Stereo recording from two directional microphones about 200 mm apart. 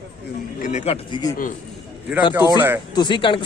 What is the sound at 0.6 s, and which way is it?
Speech, 35° left (ahead or behind).